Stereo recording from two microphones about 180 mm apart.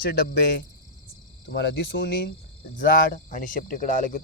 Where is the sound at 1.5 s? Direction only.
80° left; by 2.3 s 60° left (ahead or behind).